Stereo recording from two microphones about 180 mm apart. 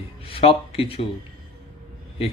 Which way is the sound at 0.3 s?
30° left (ahead or behind).